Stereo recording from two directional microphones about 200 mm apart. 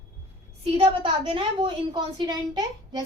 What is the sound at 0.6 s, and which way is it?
A woman's voice, 25° right (ahead or behind).